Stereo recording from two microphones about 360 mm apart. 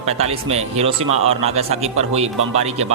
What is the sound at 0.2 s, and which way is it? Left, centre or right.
Speech, centre.